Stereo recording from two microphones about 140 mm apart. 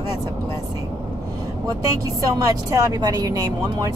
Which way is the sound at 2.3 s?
25° right (ahead or behind).